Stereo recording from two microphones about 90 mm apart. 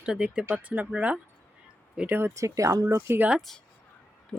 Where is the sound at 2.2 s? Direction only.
30° right (ahead or behind).